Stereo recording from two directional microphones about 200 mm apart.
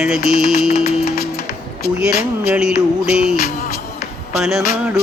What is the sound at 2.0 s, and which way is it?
Music, 5° right (ahead or behind).